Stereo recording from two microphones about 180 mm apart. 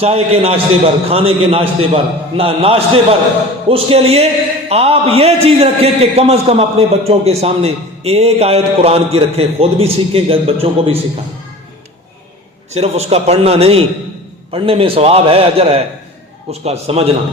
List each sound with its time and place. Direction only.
0.0 s a man's voice: 35° right (ahead or behind)
12.7 s a man's voice: 35° right (ahead or behind)